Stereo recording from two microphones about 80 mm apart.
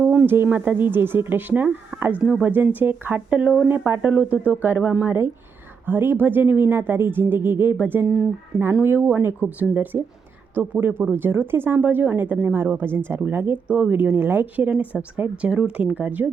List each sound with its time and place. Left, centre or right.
0.0 s speech: right
13.7 s speech: centre